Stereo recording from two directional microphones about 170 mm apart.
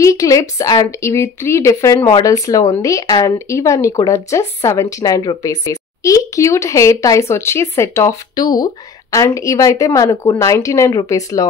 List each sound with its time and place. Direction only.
0.0 s speech: 20° left (ahead or behind)